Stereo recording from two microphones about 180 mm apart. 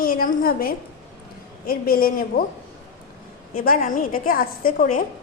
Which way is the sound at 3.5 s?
50° left (ahead or behind).